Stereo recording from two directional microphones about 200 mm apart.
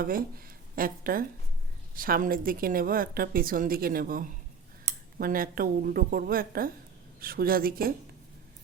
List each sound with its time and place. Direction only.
0.0 s a woman's voice: 45° right (ahead or behind)